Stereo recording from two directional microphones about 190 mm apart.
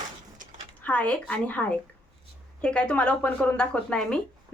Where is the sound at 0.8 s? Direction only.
5° left (ahead or behind).